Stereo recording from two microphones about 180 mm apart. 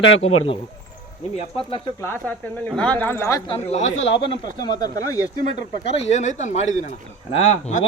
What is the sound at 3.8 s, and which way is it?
Speech, 90° left.